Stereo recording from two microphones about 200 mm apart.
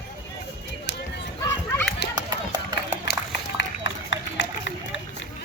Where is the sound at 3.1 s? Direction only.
55° left (ahead or behind).